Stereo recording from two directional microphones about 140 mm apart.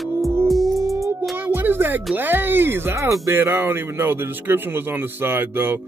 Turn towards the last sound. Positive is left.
turn(degrees=-15)  # may be behind; listen again after turning